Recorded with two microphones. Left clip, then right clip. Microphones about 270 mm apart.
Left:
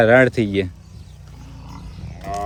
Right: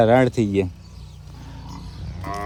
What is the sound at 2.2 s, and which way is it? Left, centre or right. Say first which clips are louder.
Livestock: left 3 dB; centre.